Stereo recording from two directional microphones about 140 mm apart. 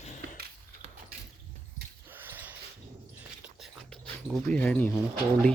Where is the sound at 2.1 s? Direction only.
15° right (ahead or behind).